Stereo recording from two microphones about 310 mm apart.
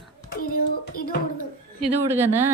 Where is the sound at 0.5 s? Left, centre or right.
Left.